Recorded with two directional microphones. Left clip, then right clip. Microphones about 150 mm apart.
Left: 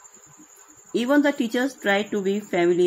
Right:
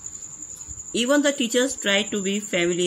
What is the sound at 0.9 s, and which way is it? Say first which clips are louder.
Speech: even; 45° right (ahead or behind).